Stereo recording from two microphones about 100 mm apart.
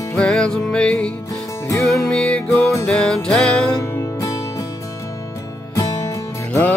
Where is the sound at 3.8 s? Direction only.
30° left (ahead or behind).